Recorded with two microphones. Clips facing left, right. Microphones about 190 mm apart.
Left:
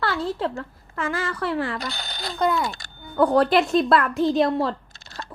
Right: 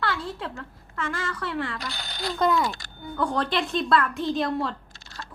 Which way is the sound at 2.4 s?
Centre (ahead or behind).